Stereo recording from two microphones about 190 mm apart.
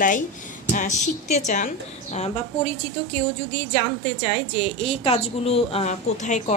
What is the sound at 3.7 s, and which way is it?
A woman's voice, 30° left (ahead or behind).